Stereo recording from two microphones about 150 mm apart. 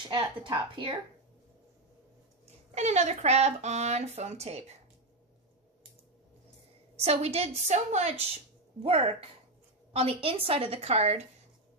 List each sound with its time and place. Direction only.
0.1 s a woman's voice: 30° right (ahead or behind)
2.7 s speech: 50° right (ahead or behind)
7.1 s a woman's voice: 45° right (ahead or behind)